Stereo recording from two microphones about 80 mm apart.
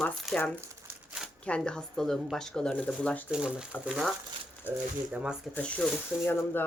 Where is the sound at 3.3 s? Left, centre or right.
Centre.